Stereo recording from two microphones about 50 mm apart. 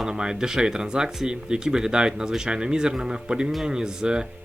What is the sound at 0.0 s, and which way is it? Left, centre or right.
Speech, centre.